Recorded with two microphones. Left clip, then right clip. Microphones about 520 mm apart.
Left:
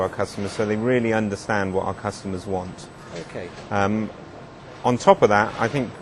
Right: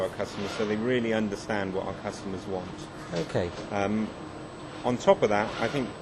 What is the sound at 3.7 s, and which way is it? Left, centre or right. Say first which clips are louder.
A man's voice: left 8 dB; left.